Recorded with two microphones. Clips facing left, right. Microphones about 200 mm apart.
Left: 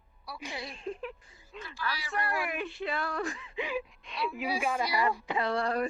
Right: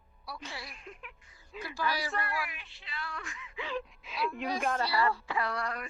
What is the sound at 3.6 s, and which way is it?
Speech, 15° left (ahead or behind).